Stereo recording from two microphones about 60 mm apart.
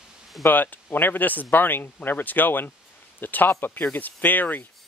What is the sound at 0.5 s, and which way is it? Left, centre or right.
Speech, left.